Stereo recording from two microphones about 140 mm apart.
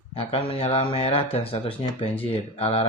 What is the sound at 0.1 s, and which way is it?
Speech, 45° left (ahead or behind).